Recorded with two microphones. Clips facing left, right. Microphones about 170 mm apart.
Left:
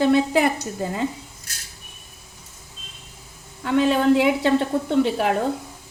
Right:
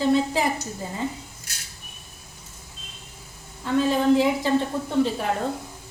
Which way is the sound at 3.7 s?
70° left (ahead or behind).